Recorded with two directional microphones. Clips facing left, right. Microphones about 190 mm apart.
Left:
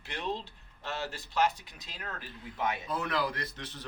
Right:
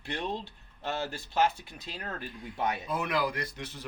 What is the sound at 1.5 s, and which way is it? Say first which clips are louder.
Speech: right 1 dB; 20° left (ahead or behind).